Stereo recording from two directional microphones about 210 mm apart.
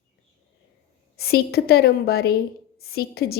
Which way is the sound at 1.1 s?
50° left (ahead or behind).